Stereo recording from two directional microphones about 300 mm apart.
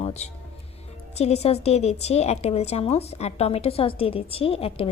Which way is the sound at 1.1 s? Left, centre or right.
Left.